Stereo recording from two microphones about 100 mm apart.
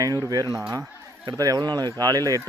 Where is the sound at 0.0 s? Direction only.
35° right (ahead or behind).